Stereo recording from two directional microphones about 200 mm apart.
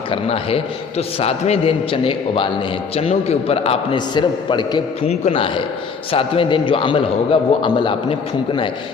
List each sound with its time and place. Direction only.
0.1 s a man's voice: 30° left (ahead or behind)